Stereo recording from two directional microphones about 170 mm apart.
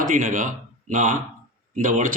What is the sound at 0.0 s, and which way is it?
Speech, 55° right (ahead or behind).